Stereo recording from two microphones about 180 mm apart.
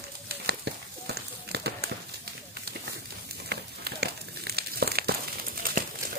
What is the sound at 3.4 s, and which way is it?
Crumpling, 65° right (ahead or behind).